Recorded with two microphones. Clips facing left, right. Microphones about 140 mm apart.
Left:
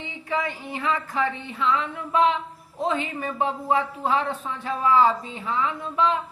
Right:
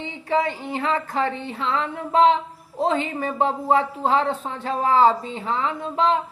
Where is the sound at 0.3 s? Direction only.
35° right (ahead or behind).